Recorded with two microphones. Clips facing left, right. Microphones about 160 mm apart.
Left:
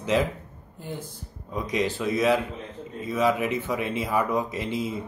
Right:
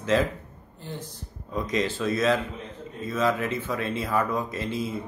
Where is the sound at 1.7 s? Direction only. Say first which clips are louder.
Left 1 dB; 15° left (ahead or behind).